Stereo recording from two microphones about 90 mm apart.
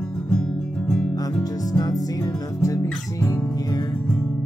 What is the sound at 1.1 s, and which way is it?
Music, 45° left (ahead or behind).